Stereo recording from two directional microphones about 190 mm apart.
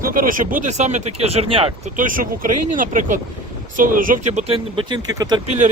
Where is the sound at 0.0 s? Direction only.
45° right (ahead or behind); by 1.9 s 30° right (ahead or behind).